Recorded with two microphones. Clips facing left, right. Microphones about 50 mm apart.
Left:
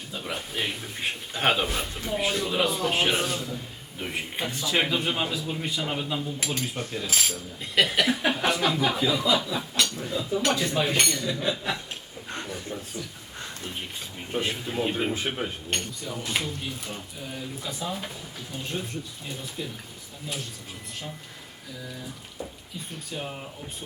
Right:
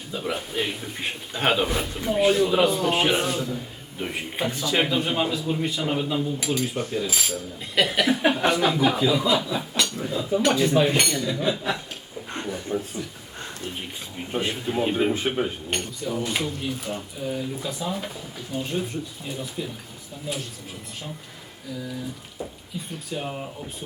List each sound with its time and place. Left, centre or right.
0.1 s a man's voice: centre
12.7 s a man's voice: right
14.3 s a man's voice: centre
23.0 s a man's voice: centre